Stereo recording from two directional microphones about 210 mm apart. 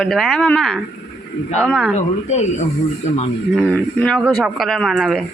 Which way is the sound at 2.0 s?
35° left (ahead or behind).